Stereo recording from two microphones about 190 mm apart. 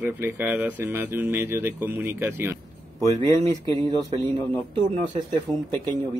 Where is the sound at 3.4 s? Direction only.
30° right (ahead or behind).